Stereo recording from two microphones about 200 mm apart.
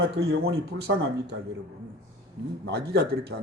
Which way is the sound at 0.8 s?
55° right (ahead or behind).